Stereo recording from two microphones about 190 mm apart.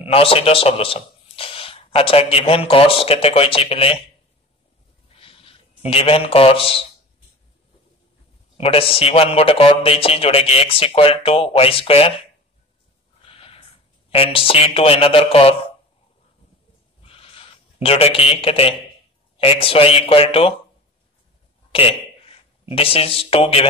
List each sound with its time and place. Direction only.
0.0 s a man's voice: 30° left (ahead or behind)
5.2 s speech: 30° left (ahead or behind)
8.5 s a man's voice: 30° left (ahead or behind)
13.2 s a sound: 30° left (ahead or behind)
14.1 s a man's voice: 30° left (ahead or behind)
17.0 s a sound: 30° left (ahead or behind)
19.3 s a man's voice: 30° left (ahead or behind)
21.7 s speech: 30° left (ahead or behind)